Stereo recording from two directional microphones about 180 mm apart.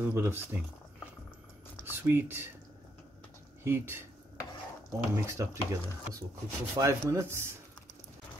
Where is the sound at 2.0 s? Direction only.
15° right (ahead or behind).